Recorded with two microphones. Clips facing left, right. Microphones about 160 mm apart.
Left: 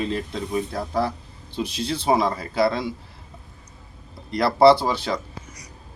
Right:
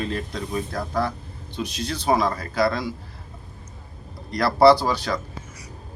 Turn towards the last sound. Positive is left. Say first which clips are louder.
# even
turn(degrees=25)  # may be behind; listen again after turning